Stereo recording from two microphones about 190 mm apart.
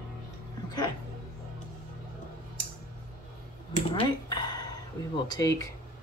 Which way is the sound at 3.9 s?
25° left (ahead or behind).